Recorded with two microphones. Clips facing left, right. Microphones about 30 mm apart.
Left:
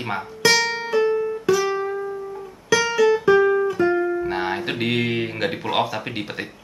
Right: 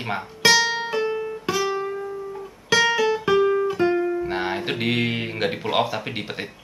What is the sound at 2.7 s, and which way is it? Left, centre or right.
Music, right.